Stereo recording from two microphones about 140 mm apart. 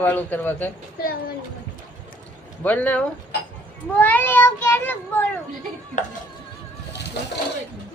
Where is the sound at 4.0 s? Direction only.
15° left (ahead or behind).